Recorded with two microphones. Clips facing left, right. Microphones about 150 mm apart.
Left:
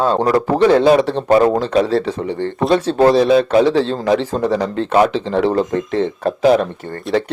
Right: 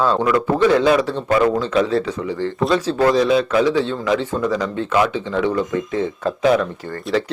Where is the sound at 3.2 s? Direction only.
35° left (ahead or behind).